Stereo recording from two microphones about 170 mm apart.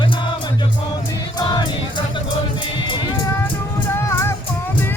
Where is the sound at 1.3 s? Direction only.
25° left (ahead or behind).